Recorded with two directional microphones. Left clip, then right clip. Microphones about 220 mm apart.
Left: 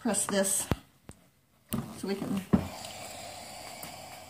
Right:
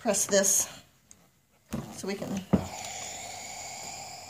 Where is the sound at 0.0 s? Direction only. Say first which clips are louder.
Right 4 dB; 45° right (ahead or behind).